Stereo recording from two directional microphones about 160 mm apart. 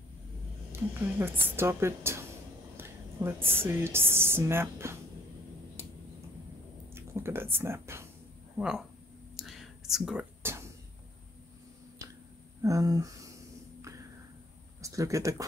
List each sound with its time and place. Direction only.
0.7 s a woman's voice: 15° right (ahead or behind)
6.9 s speech: 15° right (ahead or behind)
8.5 s speech: 5° right (ahead or behind)
9.4 s whispering: centre (ahead or behind)
10.4 s a sound: 15° right (ahead or behind)
12.0 s a sound: 20° right (ahead or behind)
12.6 s speech: 20° right (ahead or behind)
14.8 s speech: 20° right (ahead or behind)